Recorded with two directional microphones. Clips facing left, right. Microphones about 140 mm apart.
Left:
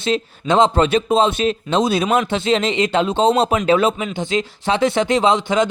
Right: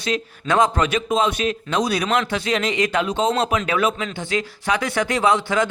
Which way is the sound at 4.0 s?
15° left (ahead or behind).